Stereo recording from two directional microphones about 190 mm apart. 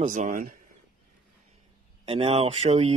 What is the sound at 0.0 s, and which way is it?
Speech, 45° right (ahead or behind).